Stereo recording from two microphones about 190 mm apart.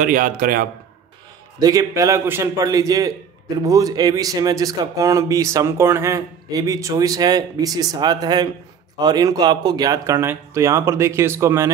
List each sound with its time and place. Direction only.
0.0 s a man's voice: 45° right (ahead or behind)
1.6 s speech: 20° right (ahead or behind)